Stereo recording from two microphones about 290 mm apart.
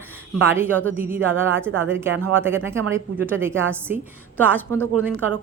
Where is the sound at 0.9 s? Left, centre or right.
Centre.